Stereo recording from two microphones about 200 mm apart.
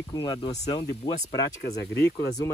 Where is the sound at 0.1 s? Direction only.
20° left (ahead or behind).